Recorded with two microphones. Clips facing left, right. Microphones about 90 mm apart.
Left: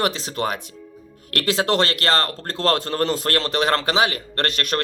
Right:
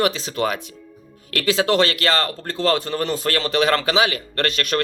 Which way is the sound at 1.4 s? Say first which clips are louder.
Right 2 dB; 50° left (ahead or behind).